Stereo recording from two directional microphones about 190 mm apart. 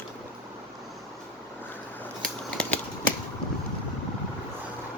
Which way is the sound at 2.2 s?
5° left (ahead or behind).